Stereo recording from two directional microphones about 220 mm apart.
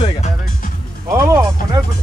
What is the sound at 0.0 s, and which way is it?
Music, 30° left (ahead or behind).